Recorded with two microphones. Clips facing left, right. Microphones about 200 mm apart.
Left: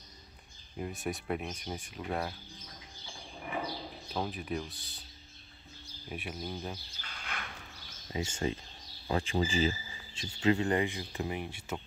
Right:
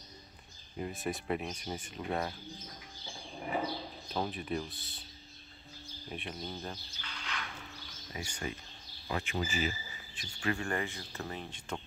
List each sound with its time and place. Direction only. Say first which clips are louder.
0.7 s speech: even; centre (ahead or behind)
4.1 s speech: even; centre (ahead or behind)
6.0 s speech: left 2 dB; centre (ahead or behind)
7.0 s a sound: right 1 dB; 50° left (ahead or behind)
8.1 s speech: left 7 dB; 25° left (ahead or behind)